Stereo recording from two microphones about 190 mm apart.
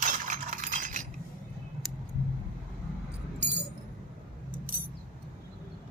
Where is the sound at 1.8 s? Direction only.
Centre (ahead or behind).